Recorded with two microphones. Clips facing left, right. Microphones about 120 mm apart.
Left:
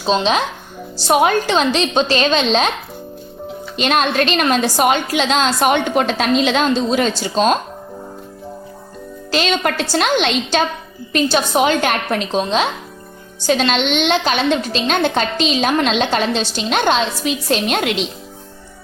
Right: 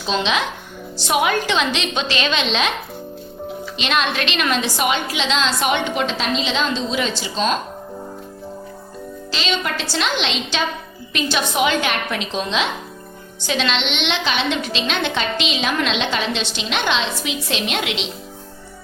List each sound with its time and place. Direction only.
0.0 s a woman's voice: 35° left (ahead or behind)
3.8 s a woman's voice: 45° left (ahead or behind)
9.3 s a woman's voice: 55° left (ahead or behind)